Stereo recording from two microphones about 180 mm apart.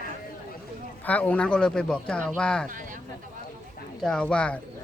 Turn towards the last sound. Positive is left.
turn(degrees=5)  # may be behind; listen again after turning